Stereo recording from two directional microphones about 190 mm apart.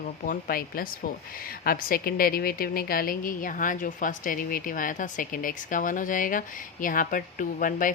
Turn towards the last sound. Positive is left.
turn(degrees=45)  # may be behind; listen again after turning